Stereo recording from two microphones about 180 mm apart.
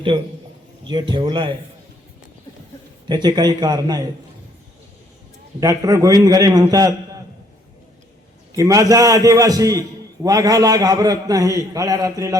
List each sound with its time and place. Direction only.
1.1 s a man's voice: 25° right (ahead or behind)
3.1 s a man's voice: 25° right (ahead or behind)
5.5 s a man's voice: 20° right (ahead or behind)
8.5 s a man's voice: 20° right (ahead or behind)